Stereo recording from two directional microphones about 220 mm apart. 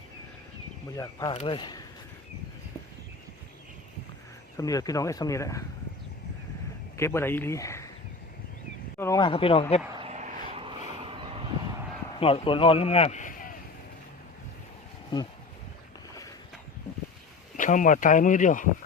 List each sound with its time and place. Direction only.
0.9 s speech: 15° left (ahead or behind)
1.3 s speech: 25° left (ahead or behind)
4.5 s speech: 15° left (ahead or behind)
6.9 s speech: 10° left (ahead or behind)
9.0 s speech: 15° left (ahead or behind)
10.0 s vehicle: 30° right (ahead or behind)
12.2 s a man's voice: 25° left (ahead or behind)
17.6 s speech: 35° left (ahead or behind)